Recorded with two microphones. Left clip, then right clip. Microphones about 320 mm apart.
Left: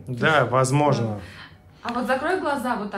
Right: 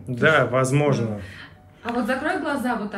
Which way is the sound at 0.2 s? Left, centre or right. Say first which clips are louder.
Right 1 dB; centre.